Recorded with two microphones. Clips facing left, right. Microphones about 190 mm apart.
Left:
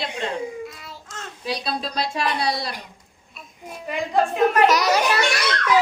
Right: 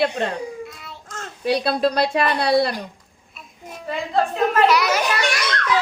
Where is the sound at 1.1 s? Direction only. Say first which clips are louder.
Right 7 dB; 50° right (ahead or behind).